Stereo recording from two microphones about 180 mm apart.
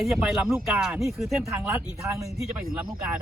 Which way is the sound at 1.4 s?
15° right (ahead or behind).